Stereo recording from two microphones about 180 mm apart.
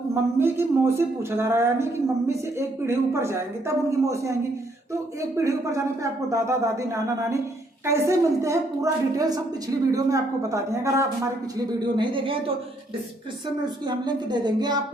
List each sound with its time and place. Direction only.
0.1 s speech: 15° right (ahead or behind)
5.4 s speech: 15° right (ahead or behind)
11.8 s a woman's voice: 25° right (ahead or behind)
13.8 s a woman's voice: 25° right (ahead or behind)